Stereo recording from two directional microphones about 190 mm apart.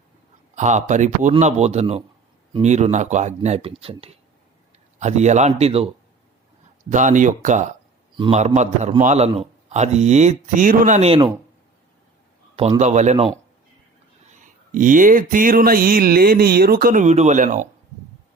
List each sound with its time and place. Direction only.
0.5 s speech: 40° right (ahead or behind)
6.9 s speech: 40° right (ahead or behind)
12.8 s speech: 35° right (ahead or behind)
14.3 s a sound: 40° right (ahead or behind)